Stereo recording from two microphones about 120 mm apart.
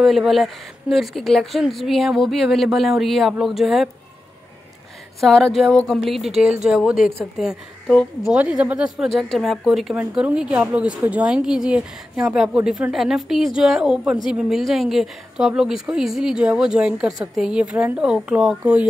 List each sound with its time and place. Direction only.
0.0 s speech: centre (ahead or behind)
5.2 s speech: centre (ahead or behind)